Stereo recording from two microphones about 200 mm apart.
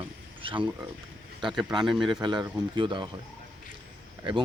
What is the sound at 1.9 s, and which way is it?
Speech, centre (ahead or behind).